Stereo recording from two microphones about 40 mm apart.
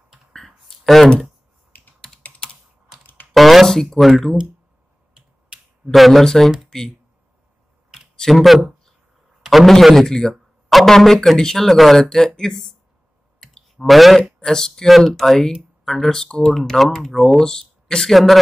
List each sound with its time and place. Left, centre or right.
0.3 s a sound: centre
1.7 s computer keyboard: left
3.3 s a sound: centre
5.9 s speech: centre
6.2 s speech: centre
8.3 s speech: centre
9.4 s a sound: centre
10.0 s speech: centre
13.7 s speech: centre
14.4 s speech: centre
14.9 s speech: centre
16.5 s speech: centre
18.1 s speech: centre